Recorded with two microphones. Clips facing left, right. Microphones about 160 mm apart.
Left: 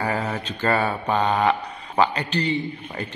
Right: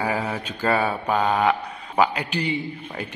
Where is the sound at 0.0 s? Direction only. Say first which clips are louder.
Even; 10° right (ahead or behind).